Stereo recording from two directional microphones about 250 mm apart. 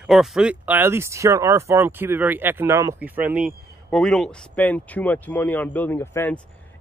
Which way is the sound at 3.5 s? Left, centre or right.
Centre.